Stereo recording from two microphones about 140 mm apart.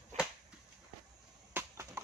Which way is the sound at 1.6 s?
20° right (ahead or behind).